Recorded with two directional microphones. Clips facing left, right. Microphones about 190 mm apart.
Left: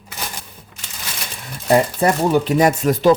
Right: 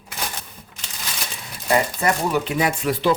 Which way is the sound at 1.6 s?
35° left (ahead or behind).